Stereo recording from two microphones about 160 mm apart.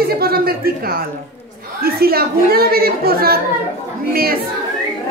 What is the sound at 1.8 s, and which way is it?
A woman's voice, 70° right (ahead or behind).